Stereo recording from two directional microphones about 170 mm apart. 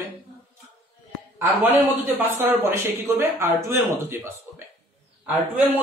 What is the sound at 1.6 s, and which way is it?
A man's voice, 10° right (ahead or behind).